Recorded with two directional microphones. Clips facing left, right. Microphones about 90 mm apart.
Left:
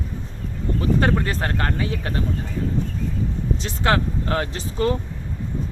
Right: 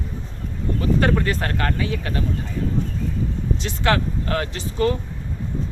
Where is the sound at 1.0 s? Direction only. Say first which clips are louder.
Right 2 dB; 25° left (ahead or behind).